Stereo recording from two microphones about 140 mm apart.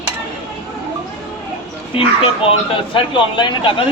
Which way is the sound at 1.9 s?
40° left (ahead or behind).